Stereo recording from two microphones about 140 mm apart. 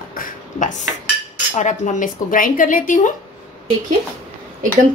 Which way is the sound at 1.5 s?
60° left (ahead or behind).